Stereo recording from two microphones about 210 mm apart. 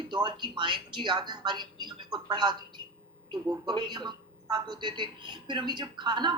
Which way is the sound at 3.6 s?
20° right (ahead or behind).